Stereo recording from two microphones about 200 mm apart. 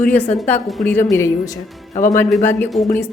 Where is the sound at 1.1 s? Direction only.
15° left (ahead or behind).